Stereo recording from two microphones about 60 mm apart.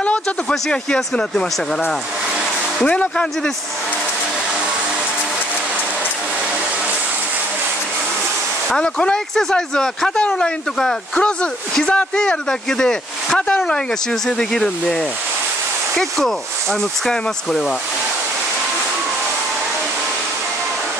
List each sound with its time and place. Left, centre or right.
0.0 s speech: centre
2.8 s speech: centre
8.6 s speech: centre
16.0 s speech: centre